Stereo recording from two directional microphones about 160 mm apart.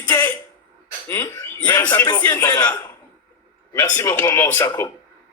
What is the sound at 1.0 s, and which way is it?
A man's voice, 15° left (ahead or behind).